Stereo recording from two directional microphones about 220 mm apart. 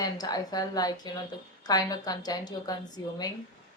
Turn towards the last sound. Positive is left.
turn(degrees=15)  # may be behind; listen again after turning